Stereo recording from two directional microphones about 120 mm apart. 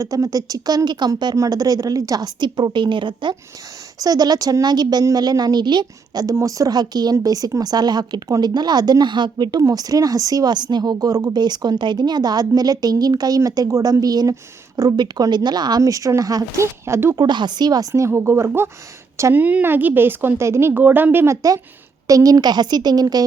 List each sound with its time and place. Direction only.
0.0 s a woman's voice: 30° right (ahead or behind)
17.2 s a woman's voice: 40° right (ahead or behind)